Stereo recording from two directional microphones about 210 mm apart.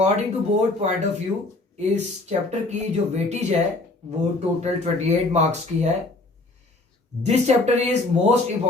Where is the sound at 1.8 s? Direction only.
30° right (ahead or behind).